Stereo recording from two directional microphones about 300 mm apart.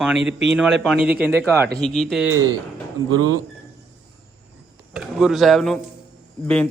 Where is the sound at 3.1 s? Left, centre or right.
Right.